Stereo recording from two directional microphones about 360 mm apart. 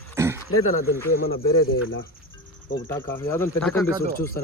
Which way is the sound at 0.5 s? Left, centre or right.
Left.